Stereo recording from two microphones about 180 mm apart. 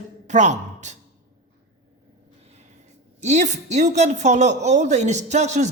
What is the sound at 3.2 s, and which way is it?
A woman's voice, 40° right (ahead or behind).